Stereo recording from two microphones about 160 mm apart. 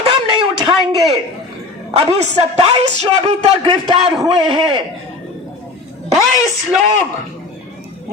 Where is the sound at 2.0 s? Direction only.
40° right (ahead or behind).